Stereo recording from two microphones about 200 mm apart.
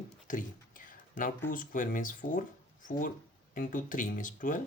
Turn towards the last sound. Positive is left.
turn(degrees=40)  # may be behind; listen again after turning